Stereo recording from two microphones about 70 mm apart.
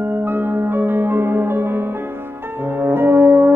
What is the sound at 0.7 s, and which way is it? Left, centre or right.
Music, right.